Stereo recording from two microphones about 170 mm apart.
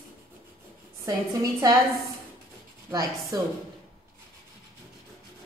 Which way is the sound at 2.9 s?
20° right (ahead or behind).